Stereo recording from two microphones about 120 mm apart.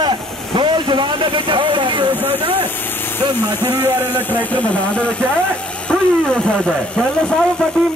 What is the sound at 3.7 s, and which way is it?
Speech, 15° right (ahead or behind).